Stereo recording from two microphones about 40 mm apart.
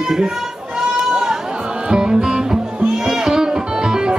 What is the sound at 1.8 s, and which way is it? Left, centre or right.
Music, right.